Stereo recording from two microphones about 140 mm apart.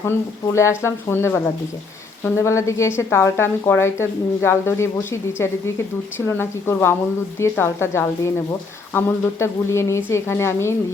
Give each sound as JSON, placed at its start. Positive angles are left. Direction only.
{"t": 0.0, "sound": "a woman's voice", "side_deg": 20}